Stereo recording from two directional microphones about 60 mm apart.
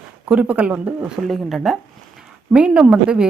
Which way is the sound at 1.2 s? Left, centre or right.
Centre.